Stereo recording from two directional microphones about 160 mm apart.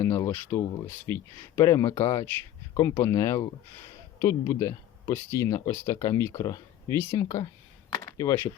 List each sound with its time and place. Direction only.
0.0 s speech: 15° left (ahead or behind)